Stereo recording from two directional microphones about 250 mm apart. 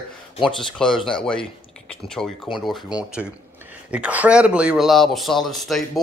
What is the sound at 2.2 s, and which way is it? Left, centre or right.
Speech, centre.